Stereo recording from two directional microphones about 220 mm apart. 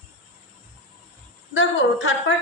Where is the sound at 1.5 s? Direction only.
55° left (ahead or behind).